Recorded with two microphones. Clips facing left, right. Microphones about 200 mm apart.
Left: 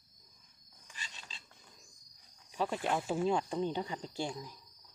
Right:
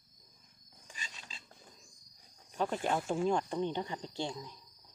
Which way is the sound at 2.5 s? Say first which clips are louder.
Right 1 dB; centre (ahead or behind).